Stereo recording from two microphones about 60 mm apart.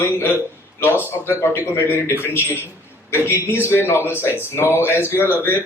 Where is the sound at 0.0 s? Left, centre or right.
Left.